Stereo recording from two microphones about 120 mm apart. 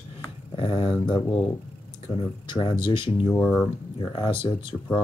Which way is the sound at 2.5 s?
40° left (ahead or behind).